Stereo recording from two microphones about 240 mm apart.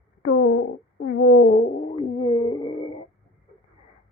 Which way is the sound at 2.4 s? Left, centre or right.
Left.